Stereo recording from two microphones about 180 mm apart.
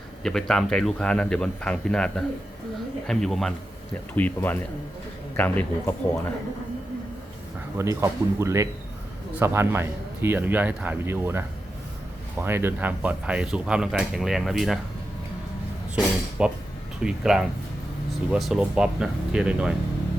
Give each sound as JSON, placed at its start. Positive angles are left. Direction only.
{"t": 0.2, "sound": "speech", "side_deg": 5}
{"t": 7.8, "sound": "a man's voice", "side_deg": -15}
{"t": 16.4, "sound": "speech", "side_deg": -5}